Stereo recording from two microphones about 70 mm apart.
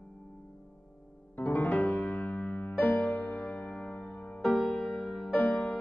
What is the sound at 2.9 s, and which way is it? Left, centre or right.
Music, centre.